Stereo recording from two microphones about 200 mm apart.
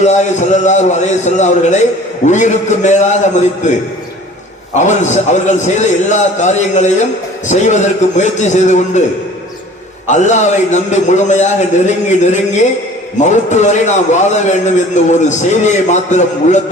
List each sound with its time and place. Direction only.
0.0 s a man's voice: 35° left (ahead or behind)
4.7 s a man's voice: 35° left (ahead or behind)
10.1 s a man's voice: 35° left (ahead or behind)